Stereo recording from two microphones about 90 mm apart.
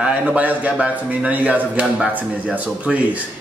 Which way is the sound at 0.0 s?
10° right (ahead or behind).